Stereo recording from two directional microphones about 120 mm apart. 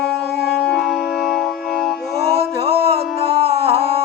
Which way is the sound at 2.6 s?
55° right (ahead or behind).